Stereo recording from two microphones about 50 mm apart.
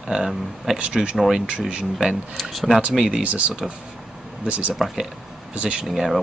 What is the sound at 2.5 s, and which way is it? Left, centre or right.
Speech, centre.